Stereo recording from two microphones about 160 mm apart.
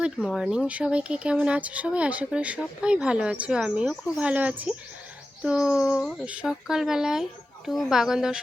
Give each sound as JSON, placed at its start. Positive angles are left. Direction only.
{"t": 0.0, "sound": "speech", "side_deg": -5}